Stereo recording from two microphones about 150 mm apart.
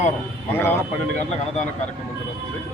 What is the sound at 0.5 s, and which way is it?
Speech, 15° left (ahead or behind).